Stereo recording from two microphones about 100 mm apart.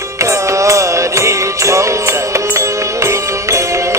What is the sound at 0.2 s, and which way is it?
Music, 30° right (ahead or behind).